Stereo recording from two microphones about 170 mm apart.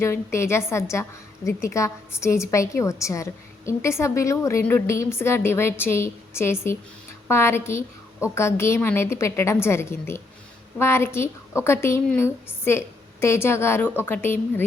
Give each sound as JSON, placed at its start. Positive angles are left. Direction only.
{"t": 0.0, "sound": "a woman's voice", "side_deg": 15}